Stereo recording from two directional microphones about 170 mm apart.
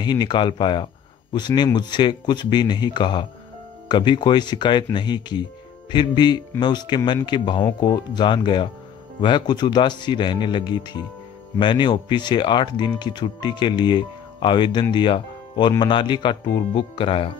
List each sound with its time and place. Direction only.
0.0 s speech: 25° left (ahead or behind)